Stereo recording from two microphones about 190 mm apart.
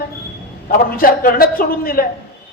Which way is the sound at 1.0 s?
50° left (ahead or behind).